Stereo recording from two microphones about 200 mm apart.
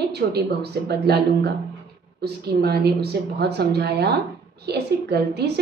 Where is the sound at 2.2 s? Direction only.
55° right (ahead or behind).